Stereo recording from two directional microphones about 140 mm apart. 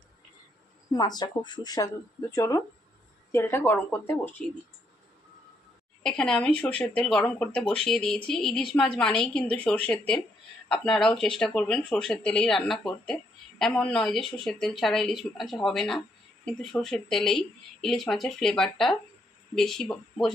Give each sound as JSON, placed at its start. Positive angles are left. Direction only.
{"t": 0.9, "sound": "speech", "side_deg": 30}
{"t": 6.0, "sound": "speech", "side_deg": 5}